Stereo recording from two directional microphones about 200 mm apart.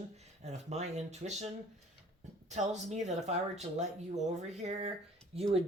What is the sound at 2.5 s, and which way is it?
Speech, 35° right (ahead or behind).